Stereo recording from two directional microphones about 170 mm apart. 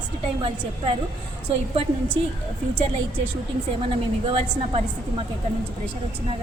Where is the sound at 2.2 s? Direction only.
30° right (ahead or behind).